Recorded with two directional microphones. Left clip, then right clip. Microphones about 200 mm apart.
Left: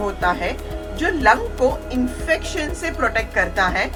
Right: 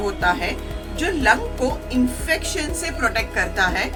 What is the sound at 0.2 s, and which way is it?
A woman's voice, 15° right (ahead or behind).